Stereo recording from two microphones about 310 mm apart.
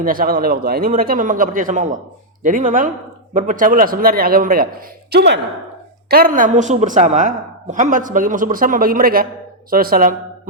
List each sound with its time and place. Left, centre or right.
0.0 s a woman's voice: right